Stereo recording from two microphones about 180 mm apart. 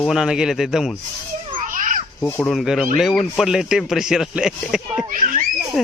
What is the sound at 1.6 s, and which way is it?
Children playing, 45° right (ahead or behind).